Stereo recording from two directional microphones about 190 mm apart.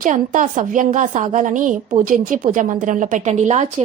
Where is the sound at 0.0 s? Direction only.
40° right (ahead or behind).